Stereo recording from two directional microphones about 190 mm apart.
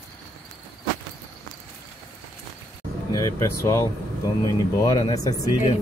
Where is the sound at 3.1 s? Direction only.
15° left (ahead or behind).